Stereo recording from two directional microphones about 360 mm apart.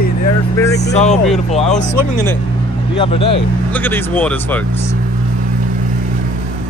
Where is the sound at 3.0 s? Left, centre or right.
Centre.